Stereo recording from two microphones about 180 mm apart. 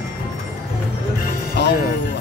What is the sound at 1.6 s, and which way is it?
Music, 65° left (ahead or behind).